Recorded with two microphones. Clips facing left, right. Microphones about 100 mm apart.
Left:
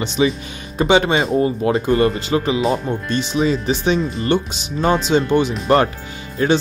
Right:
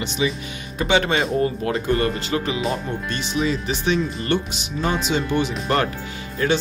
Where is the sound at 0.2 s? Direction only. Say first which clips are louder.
Left 6 dB; 40° left (ahead or behind).